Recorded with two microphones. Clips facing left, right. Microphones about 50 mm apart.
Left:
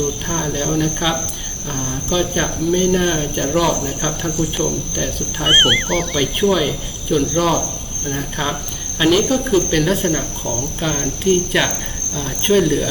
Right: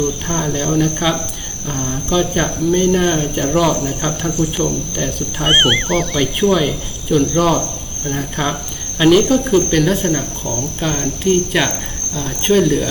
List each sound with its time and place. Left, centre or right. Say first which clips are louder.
0.3 s speech: right 2 dB; centre